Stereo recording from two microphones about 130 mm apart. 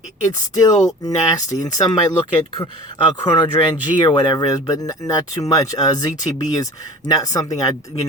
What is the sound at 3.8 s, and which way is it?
Speech, 35° left (ahead or behind).